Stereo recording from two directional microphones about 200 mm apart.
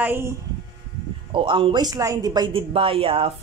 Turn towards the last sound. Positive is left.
turn(degrees=-30)  # may be behind; listen again after turning